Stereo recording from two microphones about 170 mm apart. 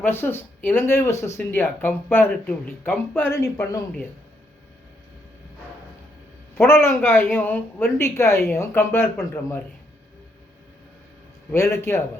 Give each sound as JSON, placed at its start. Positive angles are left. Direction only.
{"t": 0.0, "sound": "speech", "side_deg": 15}
{"t": 6.6, "sound": "speech", "side_deg": 15}
{"t": 11.5, "sound": "speech", "side_deg": 15}